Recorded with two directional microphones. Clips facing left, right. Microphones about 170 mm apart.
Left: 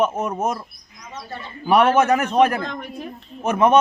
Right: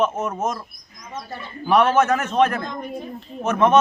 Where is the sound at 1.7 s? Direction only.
10° left (ahead or behind).